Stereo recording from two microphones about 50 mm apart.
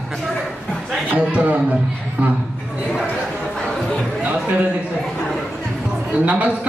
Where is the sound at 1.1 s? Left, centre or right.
Right.